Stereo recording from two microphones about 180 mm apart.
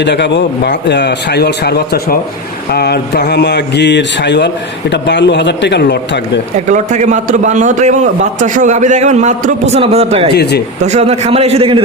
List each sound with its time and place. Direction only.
0.0 s speech: 75° left (ahead or behind)
6.7 s a man's voice: 40° right (ahead or behind)
10.3 s speech: 65° left (ahead or behind)
10.8 s a man's voice: 40° right (ahead or behind)